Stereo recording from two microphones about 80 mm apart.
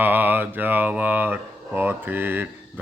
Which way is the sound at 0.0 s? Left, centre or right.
Right.